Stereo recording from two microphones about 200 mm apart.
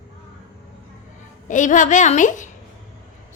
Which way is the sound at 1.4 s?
40° left (ahead or behind).